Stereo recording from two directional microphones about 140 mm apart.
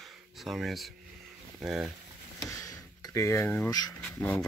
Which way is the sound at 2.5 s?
25° left (ahead or behind).